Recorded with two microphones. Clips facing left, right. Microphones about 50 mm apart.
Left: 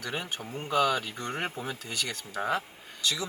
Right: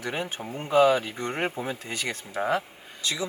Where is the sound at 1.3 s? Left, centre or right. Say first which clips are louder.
Right 5 dB; centre.